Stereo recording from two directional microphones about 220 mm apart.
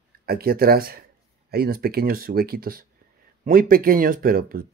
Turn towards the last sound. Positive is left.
turn(degrees=-40)  # may be behind; listen again after turning